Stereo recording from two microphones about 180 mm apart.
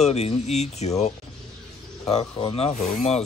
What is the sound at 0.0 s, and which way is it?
Speech, 35° left (ahead or behind).